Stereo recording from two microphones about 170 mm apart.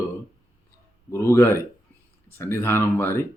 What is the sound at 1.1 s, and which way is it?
Speech, 15° left (ahead or behind).